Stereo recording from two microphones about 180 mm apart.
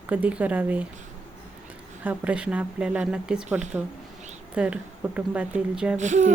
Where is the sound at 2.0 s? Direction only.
5° right (ahead or behind).